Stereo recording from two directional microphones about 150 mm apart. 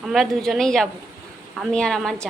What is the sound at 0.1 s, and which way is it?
A woman's voice, centre (ahead or behind).